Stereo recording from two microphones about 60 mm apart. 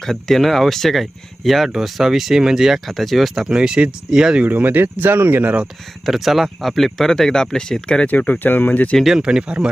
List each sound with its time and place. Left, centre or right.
0.0 s speech: centre
3.5 s speech: centre
4.4 s speech: right
6.1 s speech: centre
8.1 s speech: left
9.0 s speech: centre
9.2 s speech: centre